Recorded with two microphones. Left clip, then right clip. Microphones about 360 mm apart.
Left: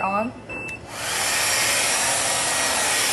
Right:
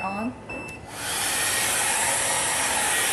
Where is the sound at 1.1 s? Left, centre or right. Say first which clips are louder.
Left 4 dB; centre.